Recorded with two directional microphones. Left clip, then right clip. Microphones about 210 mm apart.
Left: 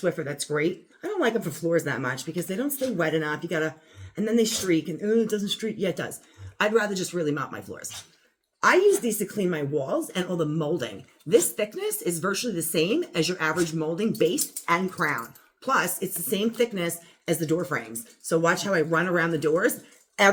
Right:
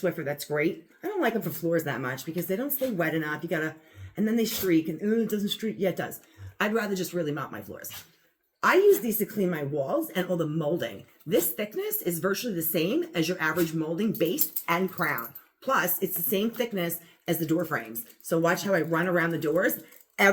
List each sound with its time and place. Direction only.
0.0 s speech: 15° left (ahead or behind)